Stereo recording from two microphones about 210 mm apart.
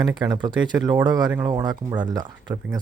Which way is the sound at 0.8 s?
5° right (ahead or behind).